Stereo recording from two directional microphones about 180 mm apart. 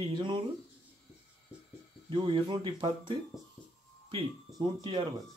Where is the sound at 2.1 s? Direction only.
25° right (ahead or behind).